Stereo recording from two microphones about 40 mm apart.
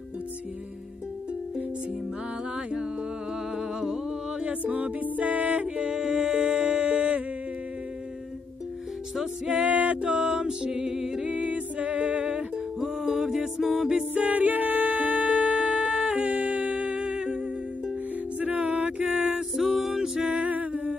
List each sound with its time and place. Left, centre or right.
3.5 s music: centre
4.4 s music: right
4.7 s music: right
5.8 s music: centre
9.5 s music: right
12.8 s music: centre
14.1 s music: right
18.4 s music: right
19.5 s music: centre
20.2 s music: right